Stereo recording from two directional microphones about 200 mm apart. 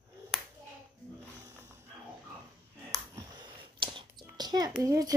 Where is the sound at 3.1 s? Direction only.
20° right (ahead or behind).